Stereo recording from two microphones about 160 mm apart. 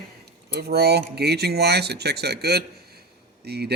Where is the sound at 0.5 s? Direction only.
85° right.